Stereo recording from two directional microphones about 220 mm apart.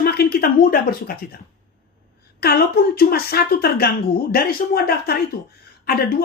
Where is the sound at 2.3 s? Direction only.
45° left (ahead or behind).